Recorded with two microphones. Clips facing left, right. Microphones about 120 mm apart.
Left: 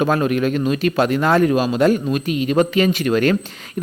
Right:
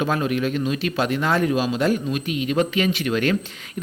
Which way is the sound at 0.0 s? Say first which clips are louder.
Left 5 dB; 50° left (ahead or behind).